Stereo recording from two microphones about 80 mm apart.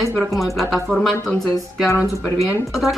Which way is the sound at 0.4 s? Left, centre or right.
Centre.